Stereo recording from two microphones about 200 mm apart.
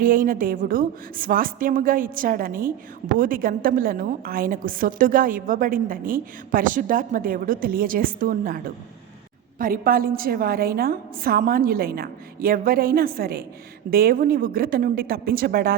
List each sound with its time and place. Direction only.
0.0 s a woman's voice: 45° right (ahead or behind)